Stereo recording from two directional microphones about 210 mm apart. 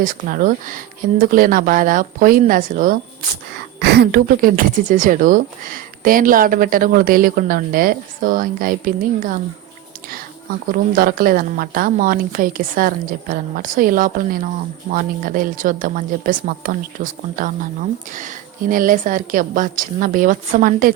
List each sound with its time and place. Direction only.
0.0 s a woman's voice: 40° right (ahead or behind)
3.8 s a woman's voice: 50° right (ahead or behind)
10.7 s a woman's voice: 40° right (ahead or behind)